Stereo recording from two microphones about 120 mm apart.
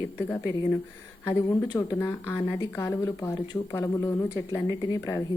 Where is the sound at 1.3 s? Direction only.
30° left (ahead or behind).